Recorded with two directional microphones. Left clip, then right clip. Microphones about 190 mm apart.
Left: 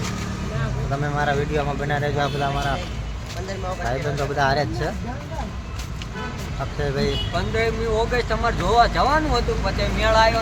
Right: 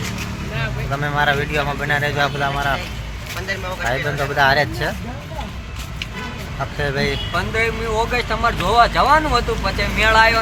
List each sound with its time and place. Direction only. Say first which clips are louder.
0.9 s speech: right 5 dB; centre (ahead or behind)
3.8 s speech: right 5 dB; centre (ahead or behind)
6.7 s speech: right 3 dB; 10° right (ahead or behind)
7.3 s speech: right 4 dB; 25° right (ahead or behind)
10.0 s speech: right 4 dB; 5° right (ahead or behind)